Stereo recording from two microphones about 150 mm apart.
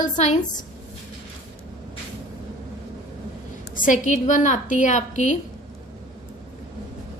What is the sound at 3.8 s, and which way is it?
A woman's voice, 60° left (ahead or behind).